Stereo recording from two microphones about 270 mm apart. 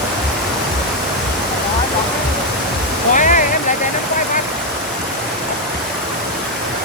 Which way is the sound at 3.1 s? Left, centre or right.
Left.